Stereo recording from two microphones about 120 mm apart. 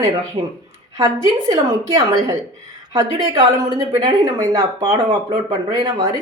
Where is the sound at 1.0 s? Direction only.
30° right (ahead or behind).